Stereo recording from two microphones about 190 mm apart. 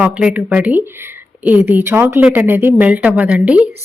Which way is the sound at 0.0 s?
5° right (ahead or behind).